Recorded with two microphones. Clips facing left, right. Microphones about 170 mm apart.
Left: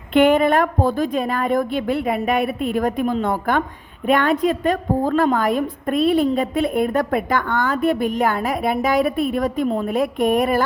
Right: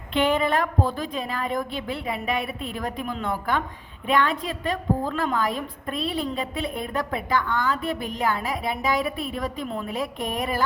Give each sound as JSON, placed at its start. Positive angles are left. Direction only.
{"t": 0.1, "sound": "a woman's voice", "side_deg": 50}